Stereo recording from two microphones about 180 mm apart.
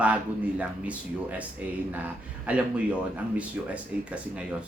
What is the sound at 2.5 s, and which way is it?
Speech, 5° right (ahead or behind).